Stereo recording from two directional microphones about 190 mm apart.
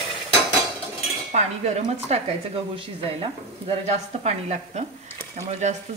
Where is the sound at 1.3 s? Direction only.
35° right (ahead or behind).